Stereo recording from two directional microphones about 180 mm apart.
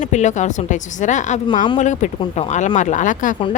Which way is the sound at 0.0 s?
40° left (ahead or behind).